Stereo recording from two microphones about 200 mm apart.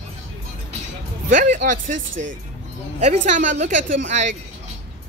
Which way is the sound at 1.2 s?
40° right (ahead or behind).